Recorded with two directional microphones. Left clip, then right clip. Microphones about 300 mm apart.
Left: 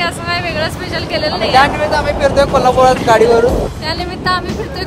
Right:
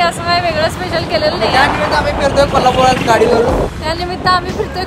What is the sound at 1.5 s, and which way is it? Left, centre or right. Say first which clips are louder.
Speech: left 4 dB; centre.